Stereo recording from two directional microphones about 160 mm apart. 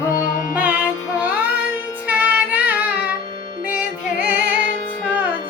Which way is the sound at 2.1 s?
10° right (ahead or behind).